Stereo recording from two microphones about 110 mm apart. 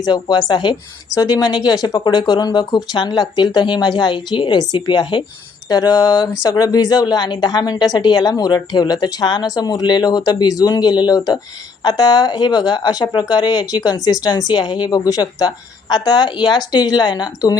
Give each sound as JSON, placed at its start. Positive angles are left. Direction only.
{"t": 0.0, "sound": "a woman's voice", "side_deg": 40}